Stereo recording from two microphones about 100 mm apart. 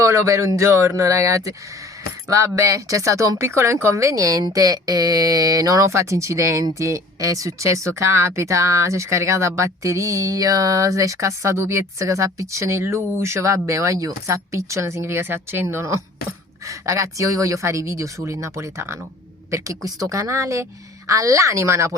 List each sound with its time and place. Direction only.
0.0 s speech: 30° right (ahead or behind)
2.6 s speech: 30° right (ahead or behind)